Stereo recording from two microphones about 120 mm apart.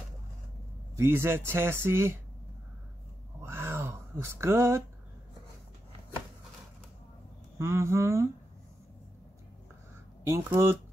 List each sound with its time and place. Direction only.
0.9 s speech: 20° right (ahead or behind)
3.3 s a sound: 20° right (ahead or behind)
7.5 s speech: 20° right (ahead or behind)
10.2 s speech: 25° right (ahead or behind)